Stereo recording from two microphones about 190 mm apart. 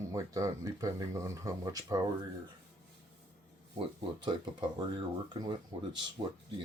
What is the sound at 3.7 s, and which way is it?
Speech, 25° right (ahead or behind).